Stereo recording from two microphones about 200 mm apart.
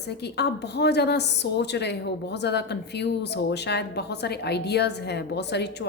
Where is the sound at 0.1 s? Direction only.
55° left (ahead or behind).